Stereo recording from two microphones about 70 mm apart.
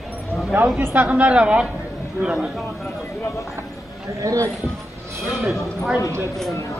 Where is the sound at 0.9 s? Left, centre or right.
Right.